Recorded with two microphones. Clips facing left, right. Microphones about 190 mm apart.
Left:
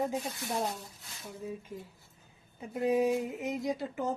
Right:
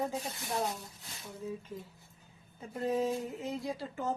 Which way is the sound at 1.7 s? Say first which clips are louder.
Left 1 dB; 10° left (ahead or behind).